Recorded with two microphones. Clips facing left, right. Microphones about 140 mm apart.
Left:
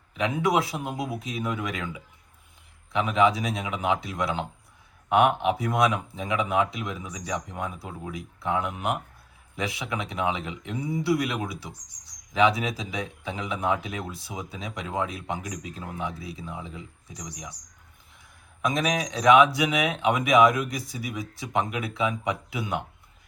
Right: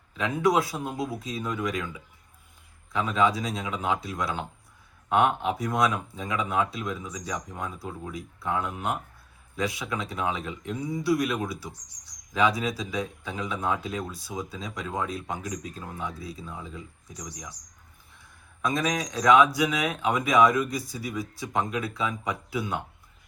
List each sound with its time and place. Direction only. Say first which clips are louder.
0.1 s a man's voice: even; 20° left (ahead or behind)